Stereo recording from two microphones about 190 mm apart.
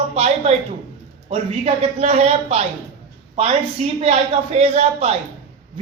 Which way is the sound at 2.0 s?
35° right (ahead or behind).